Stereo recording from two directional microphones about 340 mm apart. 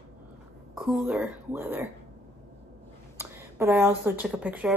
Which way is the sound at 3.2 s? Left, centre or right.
Centre.